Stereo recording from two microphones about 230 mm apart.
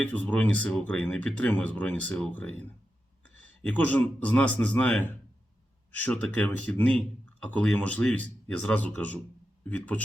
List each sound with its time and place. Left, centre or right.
0.1 s speech: centre